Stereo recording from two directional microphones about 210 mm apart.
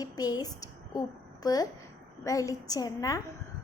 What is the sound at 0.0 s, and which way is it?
A woman's voice, 15° left (ahead or behind).